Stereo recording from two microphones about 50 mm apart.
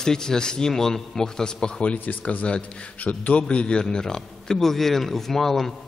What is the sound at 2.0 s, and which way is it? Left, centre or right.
Speech, left.